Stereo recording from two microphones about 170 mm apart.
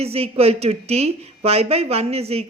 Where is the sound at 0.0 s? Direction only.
35° right (ahead or behind).